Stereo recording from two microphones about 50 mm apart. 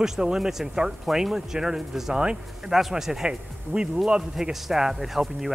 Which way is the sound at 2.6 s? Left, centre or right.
Centre.